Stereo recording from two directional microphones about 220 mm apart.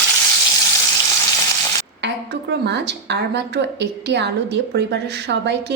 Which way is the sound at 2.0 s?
50° right (ahead or behind).